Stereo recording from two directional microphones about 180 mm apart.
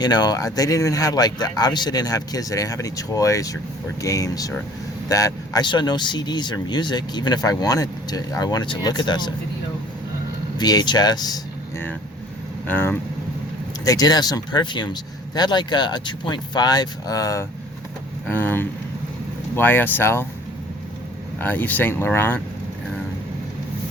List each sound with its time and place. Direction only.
0.0 s speech: 25° left (ahead or behind)
10.6 s speech: 25° left (ahead or behind)
12.6 s speech: 10° left (ahead or behind)
13.8 s speech: 20° left (ahead or behind)
21.3 s speech: 10° left (ahead or behind)